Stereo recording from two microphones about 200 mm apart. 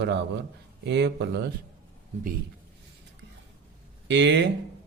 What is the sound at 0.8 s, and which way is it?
Speech, 60° right (ahead or behind).